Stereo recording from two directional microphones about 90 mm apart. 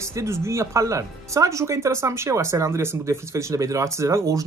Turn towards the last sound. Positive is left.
turn(degrees=-35)  # may be behind; listen again after turning